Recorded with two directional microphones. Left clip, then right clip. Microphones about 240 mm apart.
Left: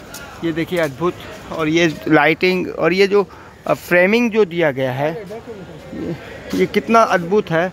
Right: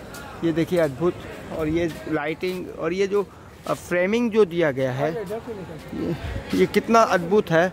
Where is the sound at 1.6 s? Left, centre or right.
Left; by 5.1 s centre.